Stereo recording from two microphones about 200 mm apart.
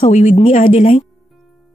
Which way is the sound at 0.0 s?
35° left (ahead or behind).